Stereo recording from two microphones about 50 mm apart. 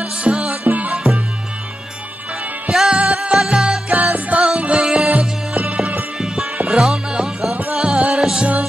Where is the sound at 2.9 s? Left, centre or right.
Centre.